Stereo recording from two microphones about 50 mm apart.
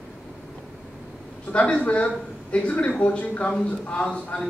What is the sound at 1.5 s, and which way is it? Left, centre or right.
A man's voice, left.